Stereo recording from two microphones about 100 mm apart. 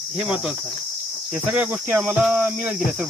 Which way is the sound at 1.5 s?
15° right (ahead or behind).